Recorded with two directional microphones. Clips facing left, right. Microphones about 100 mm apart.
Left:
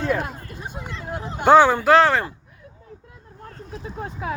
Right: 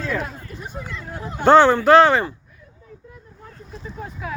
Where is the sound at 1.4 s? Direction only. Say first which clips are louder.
Right 1 dB; 10° left (ahead or behind).